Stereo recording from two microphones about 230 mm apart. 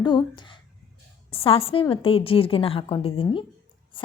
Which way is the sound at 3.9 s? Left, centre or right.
Left.